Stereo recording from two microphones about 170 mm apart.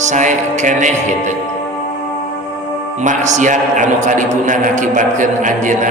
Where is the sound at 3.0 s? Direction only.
45° right (ahead or behind).